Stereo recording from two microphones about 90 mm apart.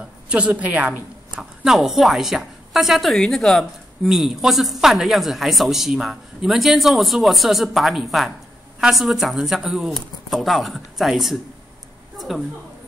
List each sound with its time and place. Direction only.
0.3 s a woman's voice: 15° right (ahead or behind)
1.4 s a woman's voice: 5° right (ahead or behind)